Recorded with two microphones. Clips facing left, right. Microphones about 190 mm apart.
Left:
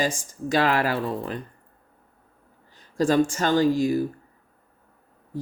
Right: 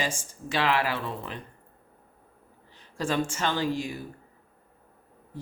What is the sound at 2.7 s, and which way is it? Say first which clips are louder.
Speech: left 8 dB; 40° left (ahead or behind).